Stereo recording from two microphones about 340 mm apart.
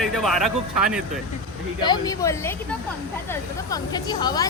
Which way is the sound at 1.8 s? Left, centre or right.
Centre.